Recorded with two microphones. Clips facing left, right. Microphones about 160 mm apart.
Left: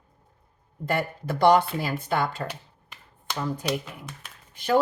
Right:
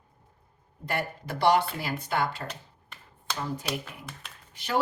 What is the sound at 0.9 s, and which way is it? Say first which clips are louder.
Speech: left 4 dB; 50° left (ahead or behind).